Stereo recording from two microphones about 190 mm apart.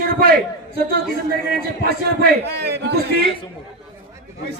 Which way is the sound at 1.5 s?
55° right (ahead or behind).